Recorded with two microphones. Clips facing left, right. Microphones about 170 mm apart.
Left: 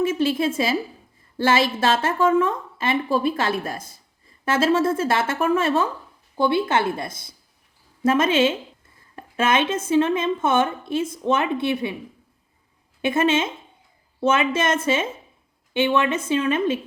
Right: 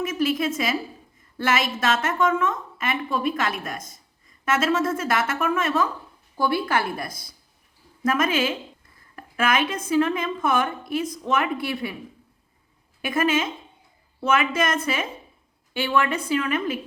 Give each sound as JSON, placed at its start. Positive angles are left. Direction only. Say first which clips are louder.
{"t": 0.0, "sound": "a woman's voice", "louder": "left 3 dB", "side_deg": 30}
{"t": 13.0, "sound": "a woman's voice", "louder": "left 3 dB", "side_deg": 25}